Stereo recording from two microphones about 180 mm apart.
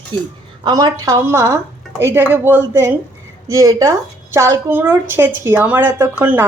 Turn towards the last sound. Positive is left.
turn(degrees=-10)  # may be behind; listen again after turning